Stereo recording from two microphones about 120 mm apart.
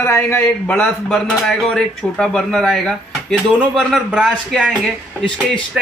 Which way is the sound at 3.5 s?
5° right (ahead or behind).